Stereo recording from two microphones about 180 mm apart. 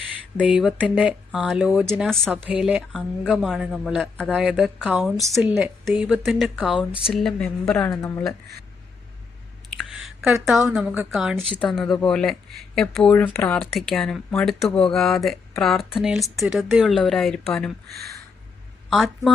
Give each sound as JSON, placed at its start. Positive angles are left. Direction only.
{"t": 0.4, "sound": "speech", "side_deg": -5}
{"t": 1.9, "sound": "speech", "side_deg": 5}
{"t": 7.9, "sound": "speech", "side_deg": 15}
{"t": 9.6, "sound": "a sound", "side_deg": 0}
{"t": 10.7, "sound": "speech", "side_deg": 0}
{"t": 18.9, "sound": "speech", "side_deg": 0}